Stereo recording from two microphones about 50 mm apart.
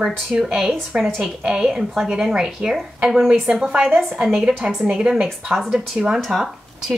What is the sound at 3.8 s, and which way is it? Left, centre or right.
Speech, centre.